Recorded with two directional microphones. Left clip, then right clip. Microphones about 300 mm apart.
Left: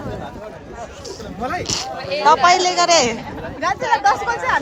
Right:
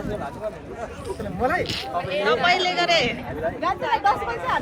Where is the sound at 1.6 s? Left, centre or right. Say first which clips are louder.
Left 3 dB; centre.